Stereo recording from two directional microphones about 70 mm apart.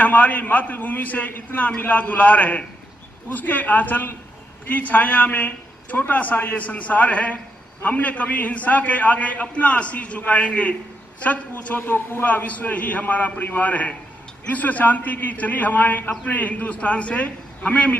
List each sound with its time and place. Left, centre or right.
0.0 s a man's voice: left